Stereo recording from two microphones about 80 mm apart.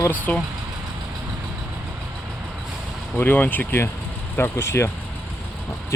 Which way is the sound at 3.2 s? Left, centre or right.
Left.